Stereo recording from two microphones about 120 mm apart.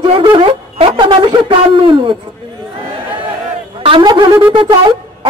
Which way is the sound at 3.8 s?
45° right (ahead or behind).